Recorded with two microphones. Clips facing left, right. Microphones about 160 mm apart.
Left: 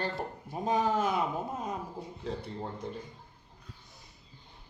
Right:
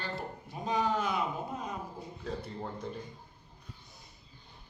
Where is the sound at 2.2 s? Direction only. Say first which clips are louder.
Left 1 dB; 25° left (ahead or behind).